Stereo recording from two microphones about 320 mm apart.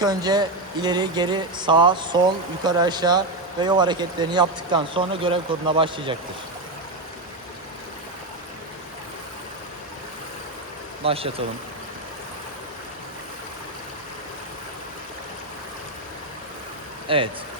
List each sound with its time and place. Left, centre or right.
0.0 s speech: centre
11.0 s speech: centre
17.1 s speech: centre